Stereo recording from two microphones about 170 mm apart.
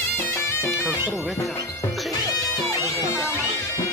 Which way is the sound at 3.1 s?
15° left (ahead or behind).